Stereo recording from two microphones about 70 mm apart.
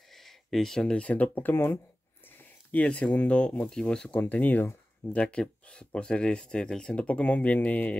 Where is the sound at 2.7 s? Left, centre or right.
Centre.